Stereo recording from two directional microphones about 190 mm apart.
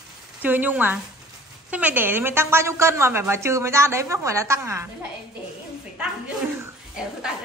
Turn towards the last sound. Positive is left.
turn(degrees=-5)  # may be behind; listen again after turning